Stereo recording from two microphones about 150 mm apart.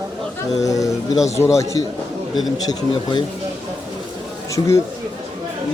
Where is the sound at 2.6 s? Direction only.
30° left (ahead or behind).